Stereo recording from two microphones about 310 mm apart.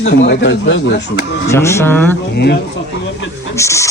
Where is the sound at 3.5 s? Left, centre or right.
Centre.